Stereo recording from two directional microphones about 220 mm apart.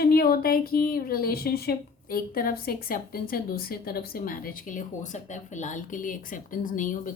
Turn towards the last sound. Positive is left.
turn(degrees=35)  # may be behind; listen again after turning